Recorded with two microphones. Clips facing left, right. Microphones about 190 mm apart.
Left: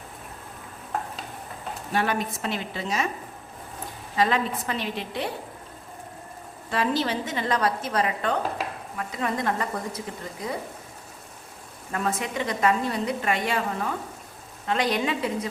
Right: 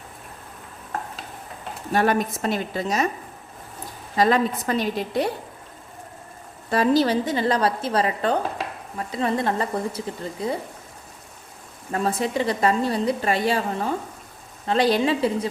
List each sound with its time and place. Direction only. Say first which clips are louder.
1.9 s a woman's voice: right 5 dB; 45° right (ahead or behind)
4.2 s a woman's voice: right 4 dB; 40° right (ahead or behind)
6.7 s a woman's voice: right 6 dB; 40° right (ahead or behind)
11.9 s a woman's voice: right 4 dB; 35° right (ahead or behind)